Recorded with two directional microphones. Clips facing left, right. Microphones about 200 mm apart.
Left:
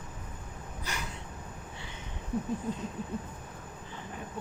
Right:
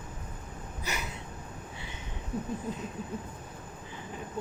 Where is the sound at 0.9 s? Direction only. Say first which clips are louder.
Right 3 dB; 5° right (ahead or behind).